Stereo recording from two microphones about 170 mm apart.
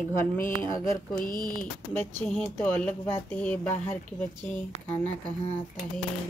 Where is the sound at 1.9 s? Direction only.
10° left (ahead or behind).